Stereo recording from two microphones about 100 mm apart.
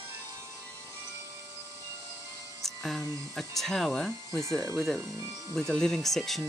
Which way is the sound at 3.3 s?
Centre (ahead or behind).